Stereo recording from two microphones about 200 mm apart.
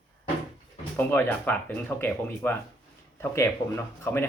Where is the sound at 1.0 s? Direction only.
10° left (ahead or behind).